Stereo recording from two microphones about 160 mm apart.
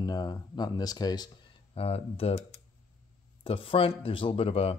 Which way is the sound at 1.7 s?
40° left (ahead or behind).